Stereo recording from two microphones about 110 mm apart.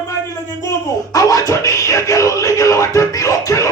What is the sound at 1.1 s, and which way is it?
Music, 30° left (ahead or behind).